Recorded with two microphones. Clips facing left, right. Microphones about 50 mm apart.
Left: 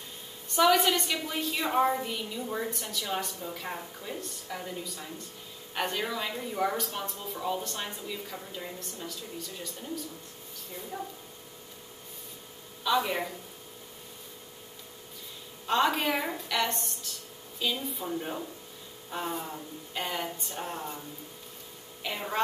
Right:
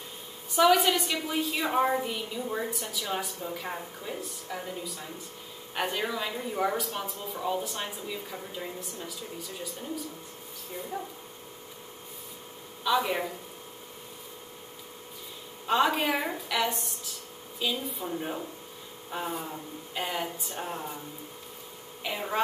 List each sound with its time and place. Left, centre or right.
0.5 s a woman's voice: centre
12.8 s a woman's voice: centre
15.6 s a woman's voice: centre
22.0 s a woman's voice: centre